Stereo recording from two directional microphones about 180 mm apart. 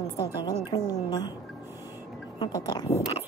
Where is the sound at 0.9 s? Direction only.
20° left (ahead or behind).